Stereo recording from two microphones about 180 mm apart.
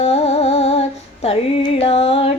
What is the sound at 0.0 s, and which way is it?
Female singing, 35° left (ahead or behind).